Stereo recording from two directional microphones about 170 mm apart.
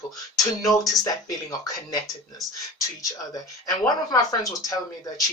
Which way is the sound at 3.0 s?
20° left (ahead or behind).